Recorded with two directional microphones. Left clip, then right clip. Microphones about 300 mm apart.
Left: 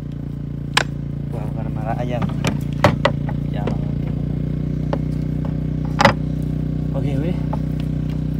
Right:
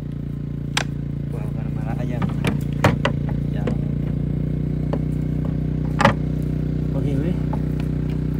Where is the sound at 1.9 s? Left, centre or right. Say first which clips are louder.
Left 7 dB; left.